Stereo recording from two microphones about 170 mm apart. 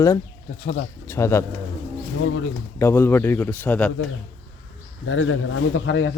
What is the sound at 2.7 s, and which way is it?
Speech, 15° left (ahead or behind).